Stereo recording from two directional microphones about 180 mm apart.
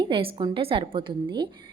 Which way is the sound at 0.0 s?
30° right (ahead or behind).